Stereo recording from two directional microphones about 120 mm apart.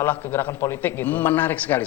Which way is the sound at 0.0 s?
15° left (ahead or behind).